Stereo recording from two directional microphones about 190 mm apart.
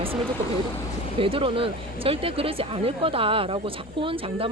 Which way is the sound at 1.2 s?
30° right (ahead or behind).